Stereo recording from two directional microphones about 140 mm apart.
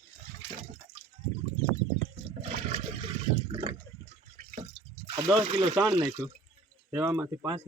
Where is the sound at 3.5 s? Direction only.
45° right (ahead or behind).